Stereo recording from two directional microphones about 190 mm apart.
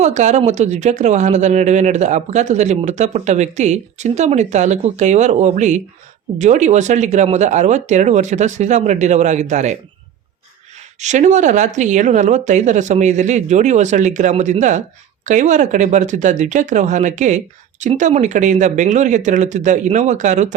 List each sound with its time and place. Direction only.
0.0 s speech: 40° right (ahead or behind)
11.0 s speech: 40° right (ahead or behind)